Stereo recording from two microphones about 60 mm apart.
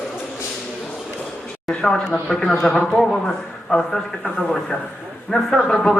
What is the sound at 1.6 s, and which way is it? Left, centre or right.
Speech, centre.